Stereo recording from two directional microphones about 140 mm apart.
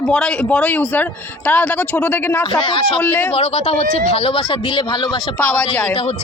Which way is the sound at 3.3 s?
45° left (ahead or behind).